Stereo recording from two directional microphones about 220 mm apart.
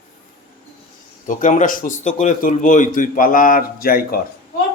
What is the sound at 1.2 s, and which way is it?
Speech, 35° left (ahead or behind).